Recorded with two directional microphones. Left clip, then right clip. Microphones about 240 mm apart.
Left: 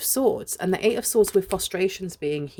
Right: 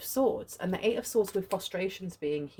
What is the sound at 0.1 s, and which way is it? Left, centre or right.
Speech, left.